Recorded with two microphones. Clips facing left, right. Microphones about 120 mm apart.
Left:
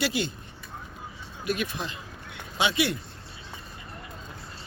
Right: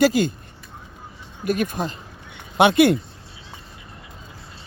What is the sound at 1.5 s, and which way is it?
Speech, 45° right (ahead or behind).